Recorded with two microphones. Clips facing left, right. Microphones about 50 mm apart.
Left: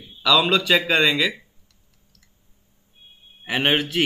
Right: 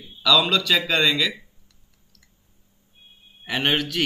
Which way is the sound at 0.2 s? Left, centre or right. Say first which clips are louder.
Left 1 dB; centre.